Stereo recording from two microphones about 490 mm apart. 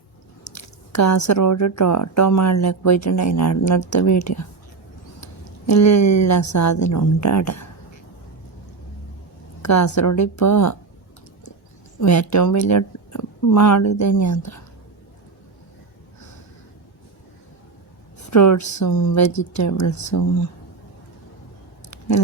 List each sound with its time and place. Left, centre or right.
0.5 s speech: left
9.6 s speech: left
11.9 s speech: left
18.3 s speech: left
21.8 s a sound: left